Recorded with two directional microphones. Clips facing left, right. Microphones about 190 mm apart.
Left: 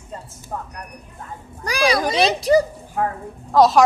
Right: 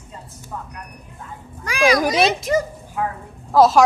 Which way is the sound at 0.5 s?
45° left (ahead or behind).